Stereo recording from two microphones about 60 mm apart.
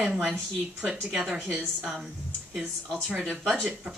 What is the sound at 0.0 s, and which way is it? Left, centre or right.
A woman's voice, centre.